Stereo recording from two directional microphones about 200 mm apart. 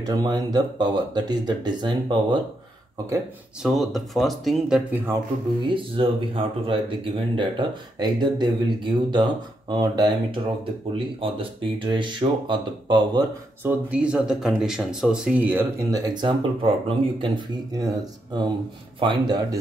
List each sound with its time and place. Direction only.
0.0 s speech: 20° right (ahead or behind)
3.6 s speech: centre (ahead or behind)
5.7 s speech: 25° right (ahead or behind)
13.7 s speech: 5° right (ahead or behind)
15.9 s speech: 20° right (ahead or behind)